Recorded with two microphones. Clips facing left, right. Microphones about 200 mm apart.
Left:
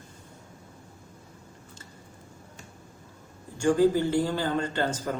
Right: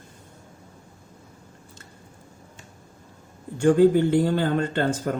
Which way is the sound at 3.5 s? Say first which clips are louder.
Right 5 dB; 60° right (ahead or behind).